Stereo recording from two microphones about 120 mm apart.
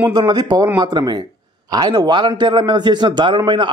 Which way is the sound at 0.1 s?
35° right (ahead or behind).